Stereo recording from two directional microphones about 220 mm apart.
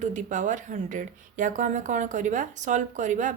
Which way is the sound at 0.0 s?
35° right (ahead or behind).